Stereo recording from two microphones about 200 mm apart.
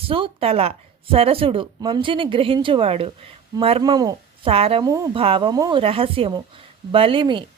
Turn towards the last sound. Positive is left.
turn(degrees=-25)  # may be behind; listen again after turning